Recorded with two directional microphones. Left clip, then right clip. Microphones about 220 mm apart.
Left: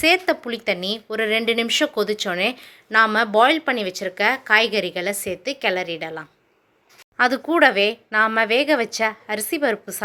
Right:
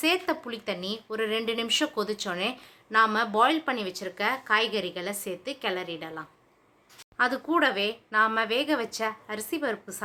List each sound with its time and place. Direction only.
0.0 s speech: 25° left (ahead or behind)